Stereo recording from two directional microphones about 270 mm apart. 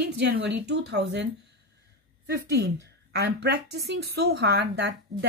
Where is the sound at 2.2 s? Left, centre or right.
Right.